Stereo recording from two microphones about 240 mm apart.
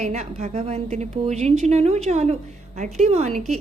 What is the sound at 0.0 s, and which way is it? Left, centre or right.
A woman's voice, right.